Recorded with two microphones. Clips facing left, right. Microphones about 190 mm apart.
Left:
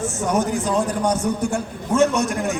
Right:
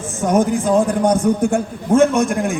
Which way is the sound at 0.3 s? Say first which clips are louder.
Right 7 dB; 50° right (ahead or behind).